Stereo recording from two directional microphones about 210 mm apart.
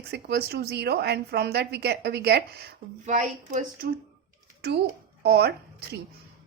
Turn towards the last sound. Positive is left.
turn(degrees=-50)  # may be behind; listen again after turning